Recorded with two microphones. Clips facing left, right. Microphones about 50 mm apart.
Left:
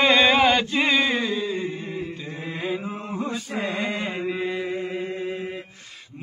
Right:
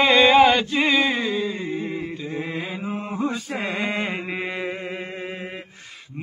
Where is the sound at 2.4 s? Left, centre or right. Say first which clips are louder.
Even; centre.